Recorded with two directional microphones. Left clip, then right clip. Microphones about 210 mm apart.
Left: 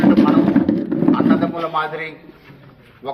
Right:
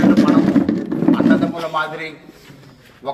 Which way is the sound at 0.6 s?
Centre (ahead or behind).